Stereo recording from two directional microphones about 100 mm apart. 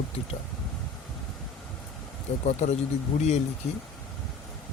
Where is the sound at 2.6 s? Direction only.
90° left.